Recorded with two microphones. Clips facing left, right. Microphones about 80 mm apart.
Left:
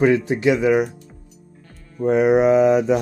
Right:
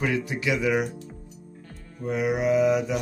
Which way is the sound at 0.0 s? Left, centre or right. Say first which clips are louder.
Left 10 dB; left.